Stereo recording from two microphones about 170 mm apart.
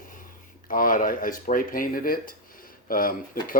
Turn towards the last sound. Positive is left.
turn(degrees=55)  # may be behind; listen again after turning